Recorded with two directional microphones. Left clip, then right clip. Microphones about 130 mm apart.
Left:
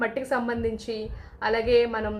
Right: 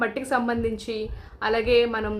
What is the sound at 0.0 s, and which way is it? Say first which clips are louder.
A woman's voice: right 2 dB; 20° right (ahead or behind).